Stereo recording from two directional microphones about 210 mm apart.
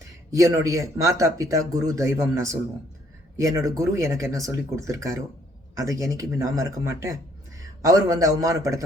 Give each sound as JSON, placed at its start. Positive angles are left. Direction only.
{"t": 0.3, "sound": "a man's voice", "side_deg": -15}